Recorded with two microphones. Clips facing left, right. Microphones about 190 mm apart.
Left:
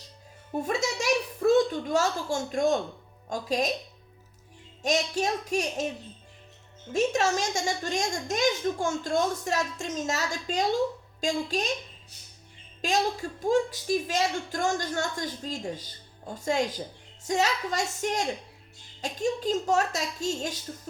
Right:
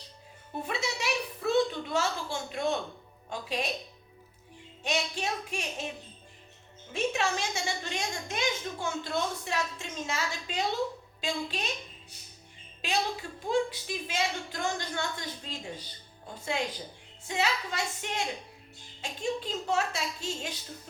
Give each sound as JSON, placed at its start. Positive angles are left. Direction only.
{"t": 0.5, "sound": "a woman's voice", "side_deg": 45}
{"t": 4.8, "sound": "a woman's voice", "side_deg": 40}
{"t": 6.9, "sound": "a woman's voice", "side_deg": 40}
{"t": 13.4, "sound": "a woman's voice", "side_deg": 45}